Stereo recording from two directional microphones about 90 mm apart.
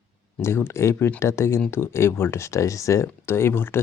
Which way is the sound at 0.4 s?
30° left (ahead or behind).